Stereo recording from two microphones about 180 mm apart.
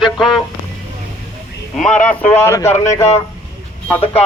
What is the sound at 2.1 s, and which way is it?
Speech, 10° left (ahead or behind).